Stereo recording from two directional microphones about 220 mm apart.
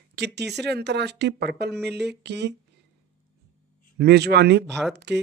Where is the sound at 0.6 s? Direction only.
50° right (ahead or behind).